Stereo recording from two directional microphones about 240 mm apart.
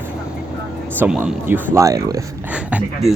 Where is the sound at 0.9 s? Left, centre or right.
Centre.